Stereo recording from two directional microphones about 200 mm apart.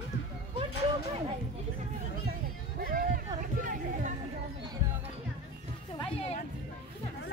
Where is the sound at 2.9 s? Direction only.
45° right (ahead or behind).